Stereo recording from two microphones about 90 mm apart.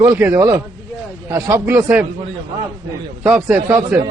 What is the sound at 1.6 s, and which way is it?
Speech, 25° right (ahead or behind).